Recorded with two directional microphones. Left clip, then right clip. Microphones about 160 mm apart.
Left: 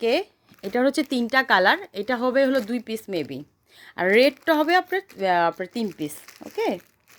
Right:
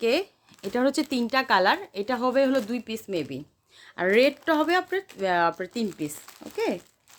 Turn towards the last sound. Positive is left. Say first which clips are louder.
# left 2 dB
turn(degrees=30)  # may be behind; listen again after turning